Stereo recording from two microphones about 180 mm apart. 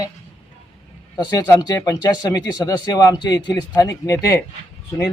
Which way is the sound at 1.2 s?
20° left (ahead or behind).